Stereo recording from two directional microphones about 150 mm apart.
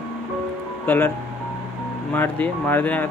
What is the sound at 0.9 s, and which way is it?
Speech, 10° left (ahead or behind).